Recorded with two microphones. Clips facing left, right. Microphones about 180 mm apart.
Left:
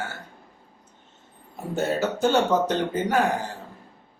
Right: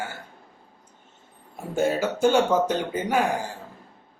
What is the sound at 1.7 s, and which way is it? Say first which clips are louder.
Speech: right 1 dB; 10° right (ahead or behind).